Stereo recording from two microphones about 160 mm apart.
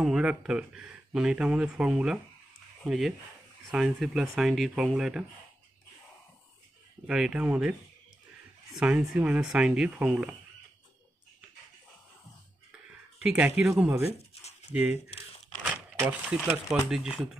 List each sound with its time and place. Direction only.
0.0 s speech: 5° right (ahead or behind)
7.1 s speech: 5° right (ahead or behind)
8.7 s speech: 5° right (ahead or behind)
13.2 s speech: 5° right (ahead or behind)
14.1 s a sound: 40° left (ahead or behind)
14.7 s speech: 10° right (ahead or behind)
15.6 s crumpling: 10° right (ahead or behind)
16.4 s speech: 5° right (ahead or behind)